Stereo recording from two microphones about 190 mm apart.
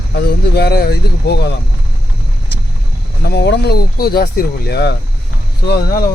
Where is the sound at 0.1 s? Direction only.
60° left (ahead or behind).